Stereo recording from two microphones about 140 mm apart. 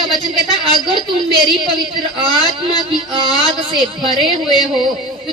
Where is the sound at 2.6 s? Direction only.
35° right (ahead or behind).